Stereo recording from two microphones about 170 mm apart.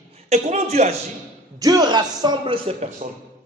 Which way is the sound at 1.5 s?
20° right (ahead or behind).